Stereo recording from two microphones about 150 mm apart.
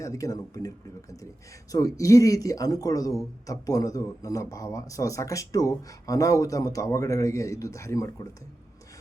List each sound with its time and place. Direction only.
0.0 s speech: 20° left (ahead or behind)
1.7 s speech: 20° left (ahead or behind)